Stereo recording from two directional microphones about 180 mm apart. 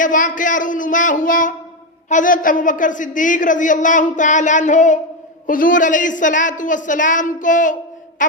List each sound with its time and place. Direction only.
0.0 s a woman's voice: 45° left (ahead or behind)